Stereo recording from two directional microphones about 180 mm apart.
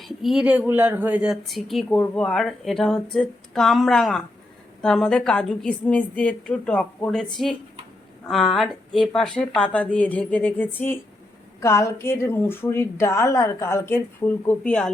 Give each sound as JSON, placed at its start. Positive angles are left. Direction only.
{"t": 0.0, "sound": "a woman's voice", "side_deg": 0}